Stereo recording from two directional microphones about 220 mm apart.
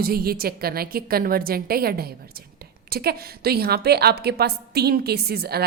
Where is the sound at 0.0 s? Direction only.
45° right (ahead or behind).